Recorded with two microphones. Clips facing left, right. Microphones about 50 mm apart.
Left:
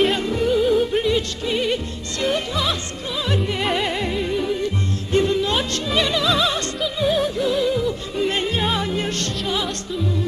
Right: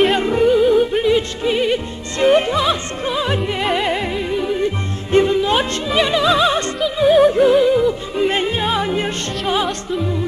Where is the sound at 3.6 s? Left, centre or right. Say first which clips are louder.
Right 5 dB; centre.